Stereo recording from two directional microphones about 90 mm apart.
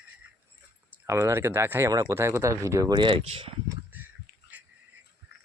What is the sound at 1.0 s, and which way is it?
Speech, 30° right (ahead or behind).